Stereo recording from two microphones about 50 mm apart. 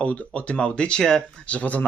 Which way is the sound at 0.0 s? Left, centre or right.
Left.